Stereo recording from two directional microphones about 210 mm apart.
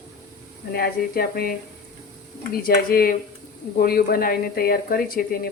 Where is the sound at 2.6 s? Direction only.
45° left (ahead or behind).